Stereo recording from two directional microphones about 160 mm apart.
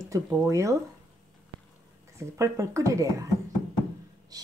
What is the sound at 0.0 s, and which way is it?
Speech, 20° right (ahead or behind).